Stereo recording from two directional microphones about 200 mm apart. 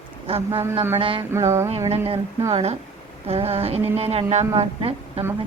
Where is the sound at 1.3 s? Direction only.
15° right (ahead or behind).